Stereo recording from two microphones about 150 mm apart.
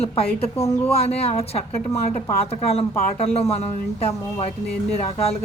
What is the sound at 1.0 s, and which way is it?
Speech, 45° left (ahead or behind).